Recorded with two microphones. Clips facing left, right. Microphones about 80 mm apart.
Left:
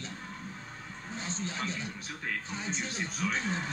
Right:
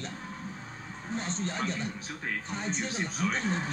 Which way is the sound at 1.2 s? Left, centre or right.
Right.